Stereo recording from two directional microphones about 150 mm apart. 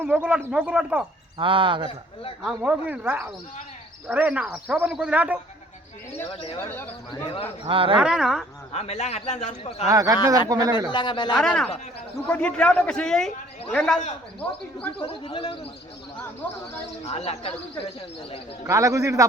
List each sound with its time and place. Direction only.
0.0 s a man's voice: 10° right (ahead or behind)
1.4 s speech: 35° right (ahead or behind)
2.4 s a man's voice: 5° right (ahead or behind)
6.3 s a man's voice: 40° left (ahead or behind)
7.7 s speech: 35° right (ahead or behind)
7.9 s speech: 5° right (ahead or behind)
8.7 s a man's voice: 45° left (ahead or behind)
9.9 s a man's voice: 25° right (ahead or behind)
10.9 s a man's voice: 30° left (ahead or behind)
11.3 s a man's voice: 5° left (ahead or behind)
14.9 s a man's voice: 35° left (ahead or behind)
16.4 s a man's voice: 10° left (ahead or behind)
17.1 s a man's voice: 45° left (ahead or behind)
18.6 s a man's voice: 20° right (ahead or behind)